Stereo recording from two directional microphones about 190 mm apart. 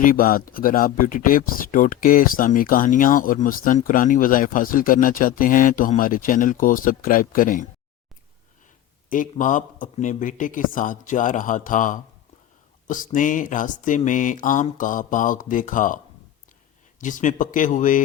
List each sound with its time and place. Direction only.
0.0 s speech: 45° left (ahead or behind)
9.0 s speech: 45° left (ahead or behind)
17.0 s speech: 40° left (ahead or behind)